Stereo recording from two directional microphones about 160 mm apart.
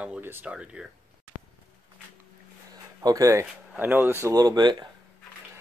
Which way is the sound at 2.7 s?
25° right (ahead or behind).